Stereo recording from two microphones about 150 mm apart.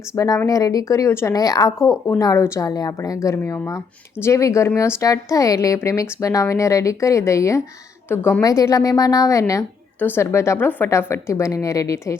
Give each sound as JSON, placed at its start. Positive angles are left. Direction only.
{"t": 0.2, "sound": "speech", "side_deg": 25}